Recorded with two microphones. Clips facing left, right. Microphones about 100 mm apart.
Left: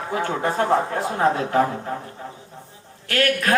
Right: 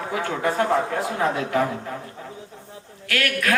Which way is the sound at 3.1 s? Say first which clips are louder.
Left 3 dB; 35° left (ahead or behind).